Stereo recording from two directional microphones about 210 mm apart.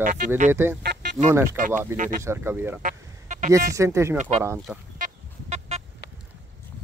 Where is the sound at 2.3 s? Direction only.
10° right (ahead or behind).